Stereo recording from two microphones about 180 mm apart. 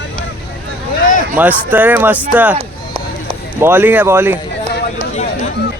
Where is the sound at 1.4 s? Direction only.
10° right (ahead or behind).